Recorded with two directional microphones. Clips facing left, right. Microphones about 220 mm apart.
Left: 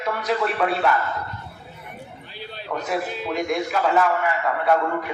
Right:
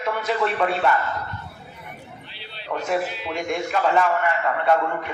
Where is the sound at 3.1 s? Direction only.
45° left (ahead or behind).